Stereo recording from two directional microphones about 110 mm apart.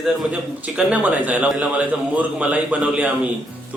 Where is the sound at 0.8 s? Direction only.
10° right (ahead or behind).